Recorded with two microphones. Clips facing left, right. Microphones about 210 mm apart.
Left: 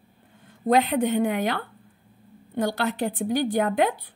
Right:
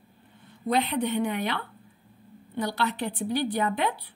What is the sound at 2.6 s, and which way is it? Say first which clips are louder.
Speech: left 4 dB; 45° left (ahead or behind).